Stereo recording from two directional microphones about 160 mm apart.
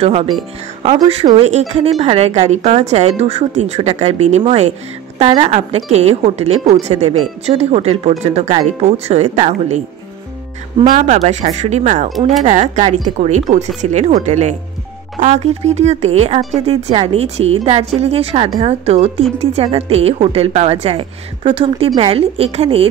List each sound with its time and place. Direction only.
0.0 s speech: 40° right (ahead or behind)
10.9 s speech: 45° right (ahead or behind)